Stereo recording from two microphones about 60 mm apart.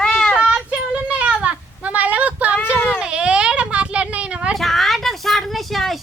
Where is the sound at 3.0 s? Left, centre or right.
Centre.